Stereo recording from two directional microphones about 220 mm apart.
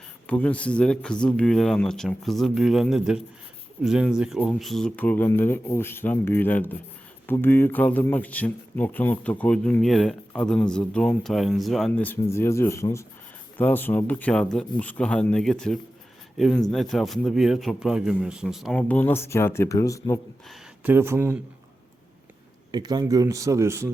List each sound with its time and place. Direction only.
0.3 s a man's voice: 5° left (ahead or behind)
20.5 s speech: 10° right (ahead or behind)
22.7 s speech: 20° right (ahead or behind)